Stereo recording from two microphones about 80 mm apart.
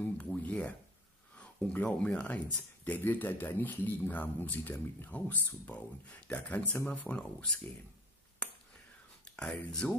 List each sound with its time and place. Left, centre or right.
0.0 s a sound: centre
1.4 s speech: centre
9.2 s speech: centre